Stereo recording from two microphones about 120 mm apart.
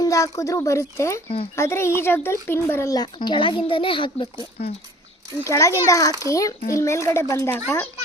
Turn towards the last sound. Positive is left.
turn(degrees=20)  # may be behind; listen again after turning